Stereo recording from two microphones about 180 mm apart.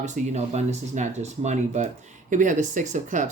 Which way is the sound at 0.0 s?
40° right (ahead or behind).